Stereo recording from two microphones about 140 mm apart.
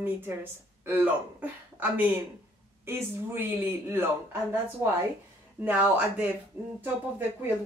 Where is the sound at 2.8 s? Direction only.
15° right (ahead or behind).